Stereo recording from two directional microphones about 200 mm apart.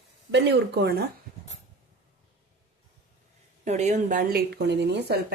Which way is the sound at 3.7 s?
35° right (ahead or behind).